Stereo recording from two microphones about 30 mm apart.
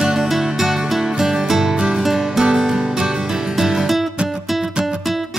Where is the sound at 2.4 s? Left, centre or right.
Right.